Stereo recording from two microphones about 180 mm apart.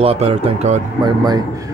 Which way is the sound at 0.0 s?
35° right (ahead or behind).